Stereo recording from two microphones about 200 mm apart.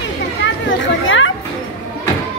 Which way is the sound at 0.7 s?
70° left (ahead or behind).